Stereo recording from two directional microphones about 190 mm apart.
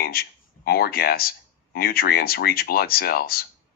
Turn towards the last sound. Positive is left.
turn(degrees=50)  # may be behind; listen again after turning